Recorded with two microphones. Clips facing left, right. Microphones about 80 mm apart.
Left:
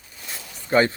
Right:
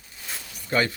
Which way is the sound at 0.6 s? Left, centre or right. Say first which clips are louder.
Left 5 dB; left.